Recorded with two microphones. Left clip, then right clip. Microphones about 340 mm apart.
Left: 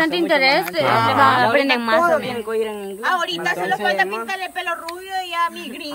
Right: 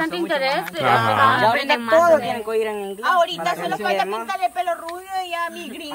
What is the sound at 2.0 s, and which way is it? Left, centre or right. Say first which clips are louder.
Speech: right 2 dB; right.